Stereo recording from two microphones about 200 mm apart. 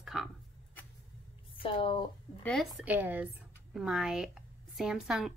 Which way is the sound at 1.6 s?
25° left (ahead or behind).